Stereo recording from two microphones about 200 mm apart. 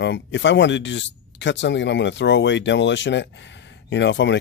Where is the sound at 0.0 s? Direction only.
60° left (ahead or behind).